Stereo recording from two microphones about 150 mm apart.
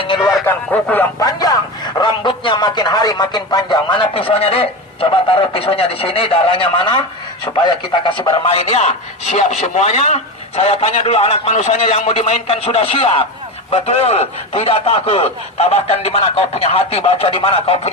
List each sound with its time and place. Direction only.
0.0 s a sound: 30° left (ahead or behind)
0.4 s speech: 10° left (ahead or behind)
1.2 s a man's voice: 25° left (ahead or behind)